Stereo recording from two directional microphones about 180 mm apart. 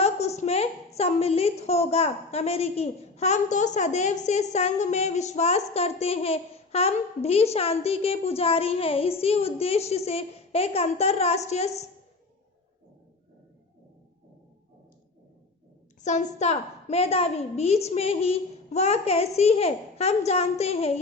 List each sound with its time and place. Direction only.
0.0 s a sound: 35° left (ahead or behind)
0.9 s speech: 35° left (ahead or behind)
16.0 s speech: 40° left (ahead or behind)